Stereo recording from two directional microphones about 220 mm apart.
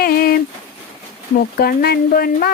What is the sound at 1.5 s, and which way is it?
Speech, 45° left (ahead or behind).